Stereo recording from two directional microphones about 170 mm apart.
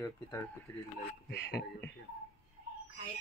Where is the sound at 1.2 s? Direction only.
80° left.